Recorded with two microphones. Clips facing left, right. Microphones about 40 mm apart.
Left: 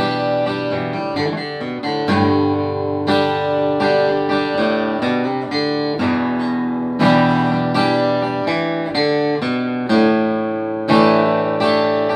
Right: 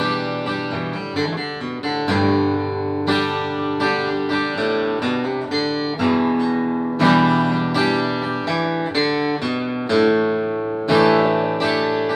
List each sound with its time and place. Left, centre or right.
2.1 s music: left
4.1 s music: centre
6.0 s music: centre
9.8 s music: centre